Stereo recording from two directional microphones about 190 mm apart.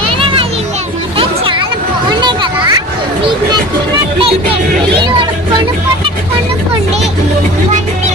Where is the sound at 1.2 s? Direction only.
25° right (ahead or behind).